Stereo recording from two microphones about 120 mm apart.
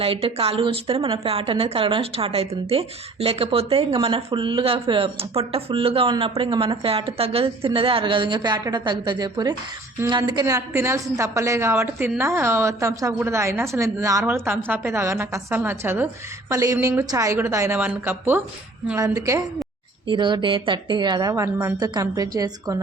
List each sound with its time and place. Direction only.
0.0 s a woman's voice: 50° right (ahead or behind); by 19.4 s 25° right (ahead or behind)
20.1 s a woman's voice: 40° right (ahead or behind)